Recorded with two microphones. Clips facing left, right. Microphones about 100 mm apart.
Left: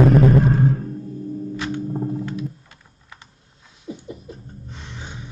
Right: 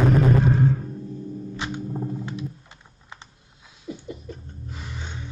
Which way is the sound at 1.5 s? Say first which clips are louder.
Left 4 dB; 20° right (ahead or behind).